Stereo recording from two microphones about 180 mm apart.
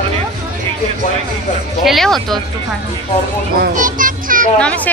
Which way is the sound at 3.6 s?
50° right (ahead or behind).